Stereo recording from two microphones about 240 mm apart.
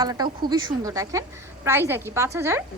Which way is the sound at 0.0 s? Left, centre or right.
Centre.